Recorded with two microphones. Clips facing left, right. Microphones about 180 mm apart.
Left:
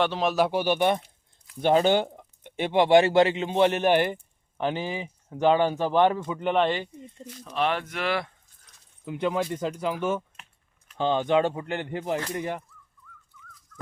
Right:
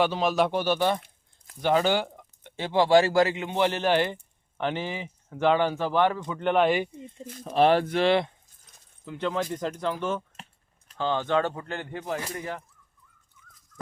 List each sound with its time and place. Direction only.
0.0 s speech: centre (ahead or behind)
6.5 s speech: 5° right (ahead or behind)
7.3 s speech: 50° right (ahead or behind)
7.6 s speech: 35° right (ahead or behind)
9.0 s speech: 10° left (ahead or behind)